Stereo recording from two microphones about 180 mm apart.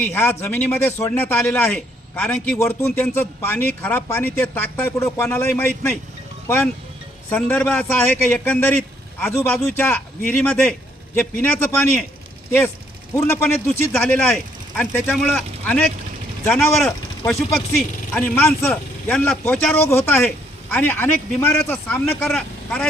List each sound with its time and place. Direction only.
0.0 s a man's voice: 10° left (ahead or behind)
7.3 s a man's voice: 5° left (ahead or behind)